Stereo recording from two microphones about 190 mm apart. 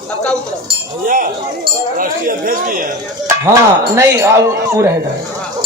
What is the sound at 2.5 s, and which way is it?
Speech, 45° right (ahead or behind).